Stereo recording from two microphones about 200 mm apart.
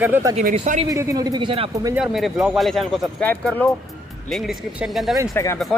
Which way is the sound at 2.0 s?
Centre (ahead or behind).